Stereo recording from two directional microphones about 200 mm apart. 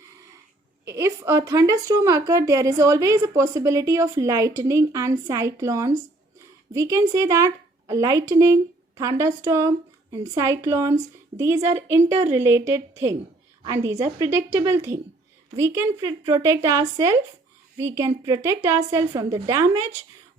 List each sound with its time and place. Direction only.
0.9 s speech: 15° right (ahead or behind)